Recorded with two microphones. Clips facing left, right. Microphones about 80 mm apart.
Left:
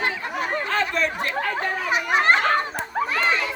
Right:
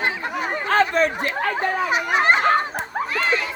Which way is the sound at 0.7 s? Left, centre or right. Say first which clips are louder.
Right 9 dB; right.